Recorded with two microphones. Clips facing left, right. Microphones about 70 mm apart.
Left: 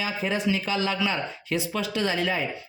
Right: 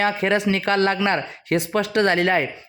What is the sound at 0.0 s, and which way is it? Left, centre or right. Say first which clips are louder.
A man's voice: right 7 dB; right.